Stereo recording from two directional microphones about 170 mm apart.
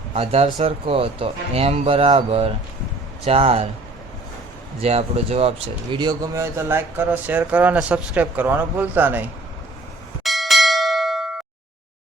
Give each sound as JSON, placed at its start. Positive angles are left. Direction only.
{"t": 0.1, "sound": "speech", "side_deg": -35}
{"t": 4.8, "sound": "speech", "side_deg": -35}
{"t": 10.2, "sound": "bell", "side_deg": 0}